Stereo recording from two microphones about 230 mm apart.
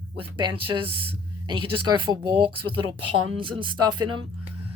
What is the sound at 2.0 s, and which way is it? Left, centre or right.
Speech, right.